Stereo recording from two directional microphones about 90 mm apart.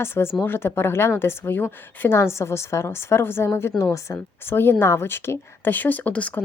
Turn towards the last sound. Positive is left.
turn(degrees=15)  # may be behind; listen again after turning